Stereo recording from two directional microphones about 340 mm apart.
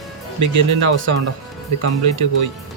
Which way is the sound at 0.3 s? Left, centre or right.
Right.